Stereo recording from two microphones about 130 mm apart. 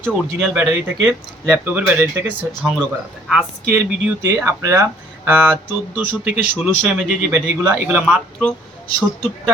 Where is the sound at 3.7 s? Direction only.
15° right (ahead or behind).